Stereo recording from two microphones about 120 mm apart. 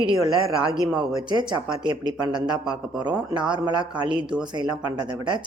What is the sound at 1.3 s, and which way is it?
A woman's voice, 40° right (ahead or behind).